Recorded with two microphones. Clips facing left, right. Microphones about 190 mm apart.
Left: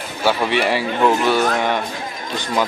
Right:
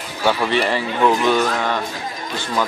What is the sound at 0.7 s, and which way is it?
A man's voice, 10° left (ahead or behind).